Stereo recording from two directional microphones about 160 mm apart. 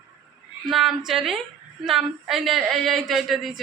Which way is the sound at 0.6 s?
Centre (ahead or behind).